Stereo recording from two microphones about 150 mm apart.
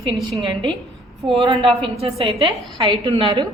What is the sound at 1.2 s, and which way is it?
A woman's voice, 35° right (ahead or behind).